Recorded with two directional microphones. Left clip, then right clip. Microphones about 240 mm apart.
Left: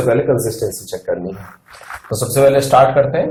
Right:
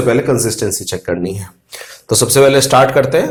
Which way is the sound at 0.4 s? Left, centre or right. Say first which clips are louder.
Right 3 dB; right.